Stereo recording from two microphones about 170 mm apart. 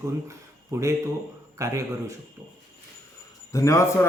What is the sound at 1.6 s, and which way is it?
Speech, 20° right (ahead or behind).